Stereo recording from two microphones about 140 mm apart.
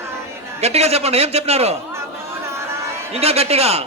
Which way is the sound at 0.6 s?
50° right (ahead or behind).